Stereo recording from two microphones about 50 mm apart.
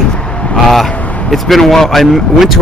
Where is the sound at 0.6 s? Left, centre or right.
Centre.